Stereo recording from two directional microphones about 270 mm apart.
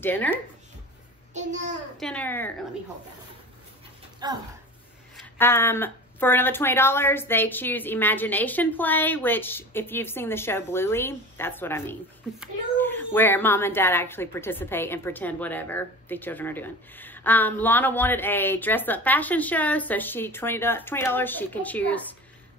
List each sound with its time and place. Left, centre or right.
0.0 s speech: centre
1.3 s a child's voice: right
2.0 s speech: centre
4.2 s speech: centre
5.1 s speech: centre